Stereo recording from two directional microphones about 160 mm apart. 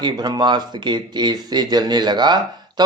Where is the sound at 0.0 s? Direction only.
25° right (ahead or behind).